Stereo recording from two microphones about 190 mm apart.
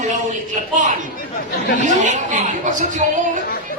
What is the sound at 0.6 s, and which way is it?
Speech, 40° right (ahead or behind).